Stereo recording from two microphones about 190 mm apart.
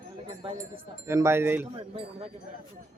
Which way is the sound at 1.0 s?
15° right (ahead or behind).